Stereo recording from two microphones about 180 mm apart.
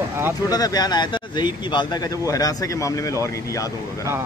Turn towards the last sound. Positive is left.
turn(degrees=20)  # may be behind; listen again after turning